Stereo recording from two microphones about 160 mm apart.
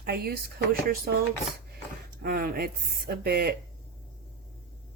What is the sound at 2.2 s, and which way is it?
Speech, 70° right (ahead or behind).